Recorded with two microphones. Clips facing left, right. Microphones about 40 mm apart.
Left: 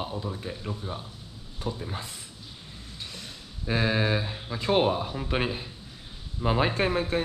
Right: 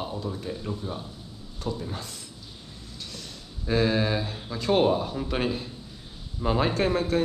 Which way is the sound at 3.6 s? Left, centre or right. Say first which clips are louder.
Right 2 dB; centre.